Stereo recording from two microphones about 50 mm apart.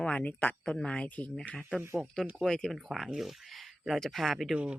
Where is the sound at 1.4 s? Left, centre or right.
Left.